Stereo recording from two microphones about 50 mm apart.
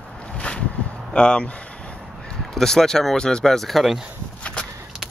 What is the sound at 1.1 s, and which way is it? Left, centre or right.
Speech, centre.